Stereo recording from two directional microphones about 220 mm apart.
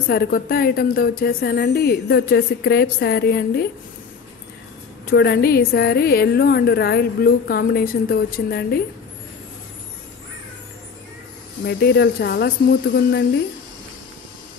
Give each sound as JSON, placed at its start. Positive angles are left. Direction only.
{"t": 0.1, "sound": "a woman's voice", "side_deg": 45}
{"t": 5.1, "sound": "a woman's voice", "side_deg": 45}
{"t": 11.6, "sound": "a woman's voice", "side_deg": 45}